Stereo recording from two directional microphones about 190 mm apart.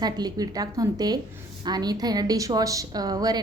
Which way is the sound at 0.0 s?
20° right (ahead or behind).